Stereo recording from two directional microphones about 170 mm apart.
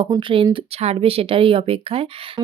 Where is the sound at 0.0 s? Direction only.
30° right (ahead or behind).